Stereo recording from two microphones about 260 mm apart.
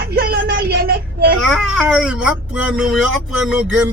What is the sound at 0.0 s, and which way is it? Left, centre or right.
Vehicle, right.